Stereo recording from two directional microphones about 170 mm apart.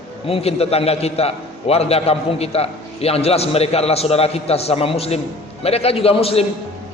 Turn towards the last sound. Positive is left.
turn(degrees=35)  # may be behind; listen again after turning